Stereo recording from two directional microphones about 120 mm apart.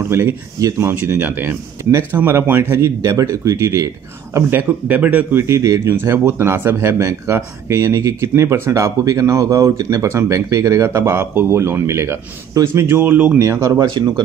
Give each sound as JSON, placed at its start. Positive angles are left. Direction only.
{"t": 0.1, "sound": "speech", "side_deg": -20}
{"t": 13.4, "sound": "speech", "side_deg": -25}